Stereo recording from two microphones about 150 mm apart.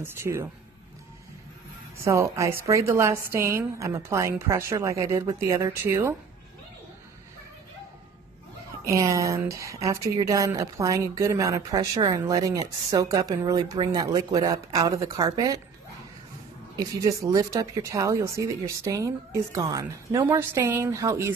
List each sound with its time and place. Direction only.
0.0 s speech: 15° right (ahead or behind)
2.0 s a woman's voice: 20° right (ahead or behind)
8.8 s a woman's voice: 20° right (ahead or behind)
16.7 s a woman's voice: 25° right (ahead or behind)